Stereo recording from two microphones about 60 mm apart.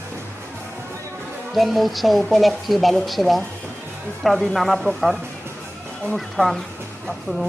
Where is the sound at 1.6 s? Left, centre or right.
Centre.